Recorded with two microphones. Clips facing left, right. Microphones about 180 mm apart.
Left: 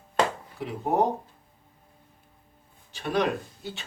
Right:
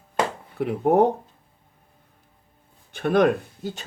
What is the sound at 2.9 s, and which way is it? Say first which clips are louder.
Speech: right 7 dB; 55° right (ahead or behind).